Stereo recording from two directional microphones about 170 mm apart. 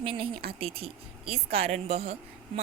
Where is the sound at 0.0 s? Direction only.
30° right (ahead or behind).